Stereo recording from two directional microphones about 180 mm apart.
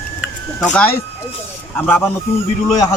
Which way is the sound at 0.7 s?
5° left (ahead or behind).